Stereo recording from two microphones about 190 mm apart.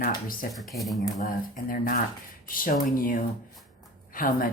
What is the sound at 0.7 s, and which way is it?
Speech, centre (ahead or behind).